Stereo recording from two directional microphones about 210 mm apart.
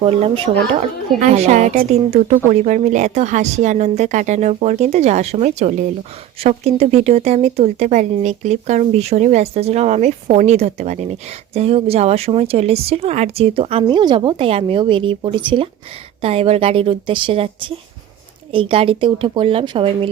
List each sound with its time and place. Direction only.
0.0 s speech: 30° right (ahead or behind)